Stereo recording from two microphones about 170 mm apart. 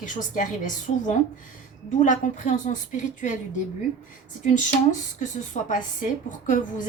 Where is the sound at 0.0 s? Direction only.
50° left (ahead or behind).